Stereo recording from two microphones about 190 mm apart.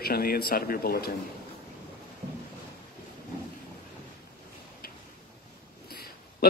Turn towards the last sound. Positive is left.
turn(degrees=55)  # may be behind; listen again after turning